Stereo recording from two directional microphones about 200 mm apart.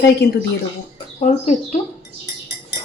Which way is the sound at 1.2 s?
35° left (ahead or behind).